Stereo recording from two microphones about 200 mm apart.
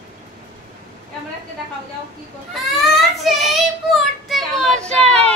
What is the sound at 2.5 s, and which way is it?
Child singing, centre (ahead or behind).